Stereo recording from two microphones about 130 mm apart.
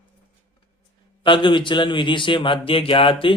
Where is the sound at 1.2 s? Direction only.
40° left (ahead or behind).